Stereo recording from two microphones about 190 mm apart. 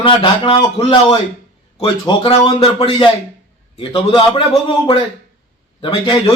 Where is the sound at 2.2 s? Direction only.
25° left (ahead or behind).